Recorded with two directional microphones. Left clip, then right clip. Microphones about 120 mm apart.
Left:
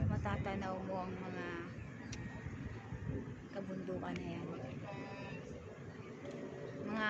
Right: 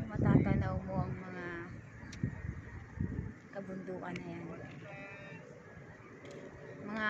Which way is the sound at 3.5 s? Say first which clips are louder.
Even; 60° right (ahead or behind).